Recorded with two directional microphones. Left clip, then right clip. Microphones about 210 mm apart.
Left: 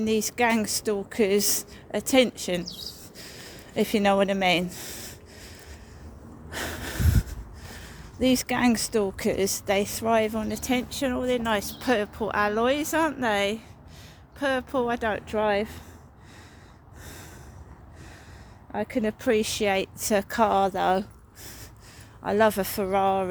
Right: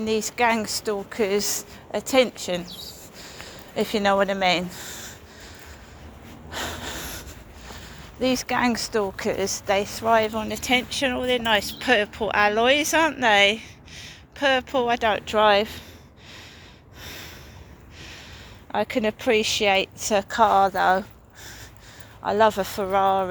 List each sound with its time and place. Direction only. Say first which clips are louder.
0.0 s a woman's voice: right 2 dB; 55° left (ahead or behind)
6.5 s snort: right 2 dB; 55° left (ahead or behind)
7.7 s speech: right 3 dB; 55° left (ahead or behind); by 15.8 s 20° left (ahead or behind)
17.0 s snort: right 7 dB; 25° left (ahead or behind)
18.7 s speech: right 5 dB; 25° left (ahead or behind); by 21.0 s 50° left (ahead or behind)
22.2 s speech: right 3 dB; 50° left (ahead or behind)